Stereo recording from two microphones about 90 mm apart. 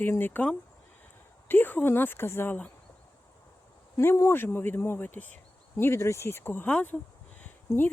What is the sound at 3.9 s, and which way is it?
Speech, 35° left (ahead or behind).